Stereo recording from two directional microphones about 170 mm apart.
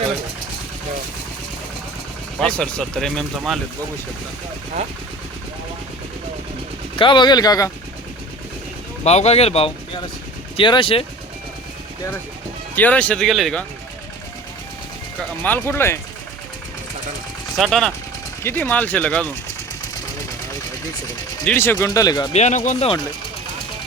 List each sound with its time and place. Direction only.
2.4 s speech: 5° left (ahead or behind)
6.9 s speech: 30° left (ahead or behind)
9.0 s speech: 40° left (ahead or behind)
12.7 s speech: 10° left (ahead or behind)
15.2 s speech: 10° left (ahead or behind)
17.6 s speech: centre (ahead or behind)
21.4 s speech: 10° left (ahead or behind)
22.3 s speech: 40° left (ahead or behind)